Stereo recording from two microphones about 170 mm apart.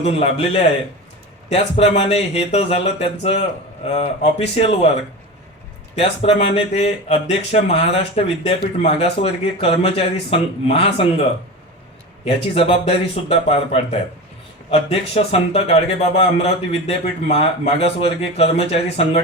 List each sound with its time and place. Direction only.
0.0 s speech: 35° left (ahead or behind)
6.0 s speech: 35° left (ahead or behind)
12.2 s speech: 35° left (ahead or behind)